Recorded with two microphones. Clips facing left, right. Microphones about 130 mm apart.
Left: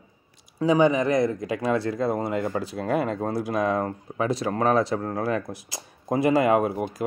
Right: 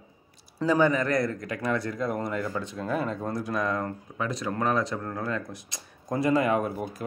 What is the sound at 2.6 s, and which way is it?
Speech, 80° left.